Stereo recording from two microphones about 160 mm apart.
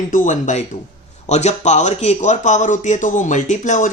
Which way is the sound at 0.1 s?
50° left (ahead or behind).